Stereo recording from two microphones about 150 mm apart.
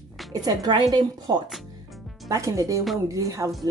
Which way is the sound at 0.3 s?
25° right (ahead or behind).